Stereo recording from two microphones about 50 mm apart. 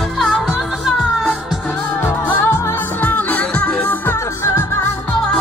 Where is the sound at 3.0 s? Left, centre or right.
Left.